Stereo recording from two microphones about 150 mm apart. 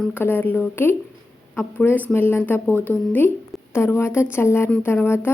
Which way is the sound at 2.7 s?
15° right (ahead or behind).